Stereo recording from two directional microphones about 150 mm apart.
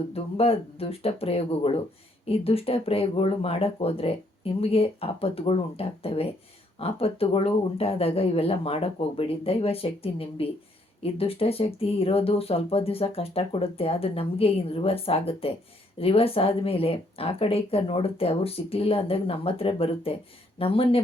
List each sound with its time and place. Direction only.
0.1 s speech: 40° left (ahead or behind)